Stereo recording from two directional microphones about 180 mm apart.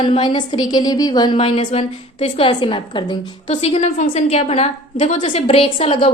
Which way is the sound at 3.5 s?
40° left (ahead or behind).